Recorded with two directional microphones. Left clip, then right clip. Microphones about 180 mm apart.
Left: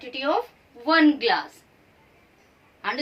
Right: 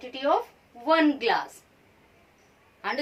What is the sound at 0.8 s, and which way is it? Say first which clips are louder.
Speech: left 3 dB; 35° right (ahead or behind).